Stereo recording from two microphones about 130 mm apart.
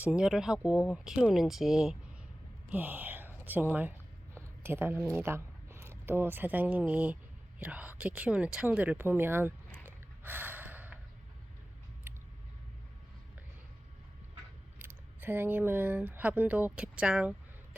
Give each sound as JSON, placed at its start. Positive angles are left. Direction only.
{"t": 0.0, "sound": "a woman's voice", "side_deg": -5}
{"t": 9.8, "sound": "gasp", "side_deg": -15}
{"t": 12.1, "sound": "a sound", "side_deg": -15}
{"t": 14.8, "sound": "speech", "side_deg": -15}